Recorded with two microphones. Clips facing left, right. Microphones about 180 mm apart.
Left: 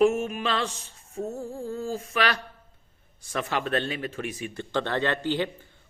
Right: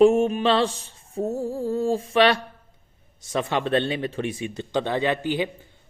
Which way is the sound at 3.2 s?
25° right (ahead or behind).